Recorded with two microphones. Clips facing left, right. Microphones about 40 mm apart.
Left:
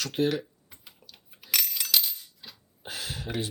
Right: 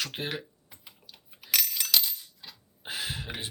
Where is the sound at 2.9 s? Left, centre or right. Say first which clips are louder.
Even; right.